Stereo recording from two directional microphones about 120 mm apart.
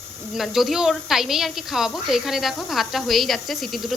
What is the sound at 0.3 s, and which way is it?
A woman's voice, centre (ahead or behind).